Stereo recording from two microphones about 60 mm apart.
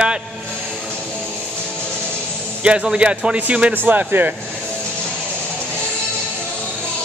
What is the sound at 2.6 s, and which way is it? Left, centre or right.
A man's voice, centre.